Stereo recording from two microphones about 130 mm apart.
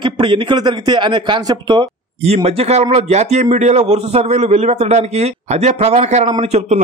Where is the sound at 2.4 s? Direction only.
55° right (ahead or behind).